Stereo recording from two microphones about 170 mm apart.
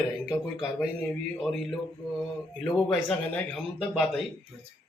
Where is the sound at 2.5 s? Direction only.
5° left (ahead or behind).